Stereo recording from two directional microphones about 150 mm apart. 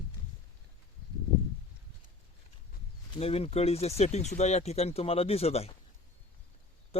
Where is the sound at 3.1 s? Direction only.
40° left (ahead or behind).